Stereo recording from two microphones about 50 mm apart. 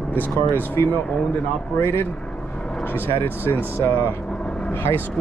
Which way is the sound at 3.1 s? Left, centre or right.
Left.